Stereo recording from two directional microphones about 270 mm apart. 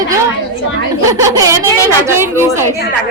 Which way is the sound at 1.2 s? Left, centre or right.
Centre.